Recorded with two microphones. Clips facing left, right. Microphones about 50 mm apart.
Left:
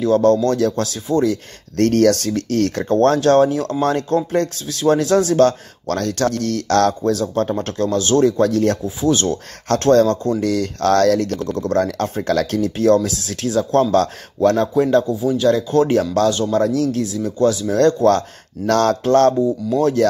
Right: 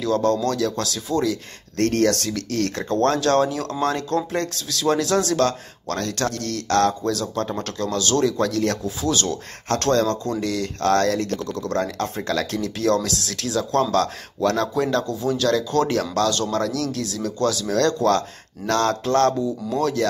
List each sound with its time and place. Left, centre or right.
0.0 s speech: left
1.8 s speech: right
2.2 s speech: left
6.5 s speech: left
7.0 s speech: left
10.4 s speech: left
11.1 s speech: right
11.3 s speech: left
12.3 s speech: left
12.6 s speech: left
13.1 s speech: right
13.4 s speech: left
15.0 s speech: centre; by 20.1 s left